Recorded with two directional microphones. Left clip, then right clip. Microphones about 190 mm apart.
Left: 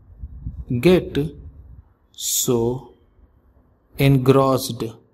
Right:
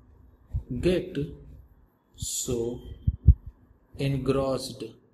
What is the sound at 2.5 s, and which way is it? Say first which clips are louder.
Speech: left 9 dB; 50° left (ahead or behind).